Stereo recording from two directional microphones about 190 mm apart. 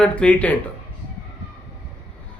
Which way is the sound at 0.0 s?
5° left (ahead or behind).